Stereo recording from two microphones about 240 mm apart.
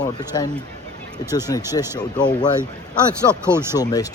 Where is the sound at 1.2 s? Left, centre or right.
Centre.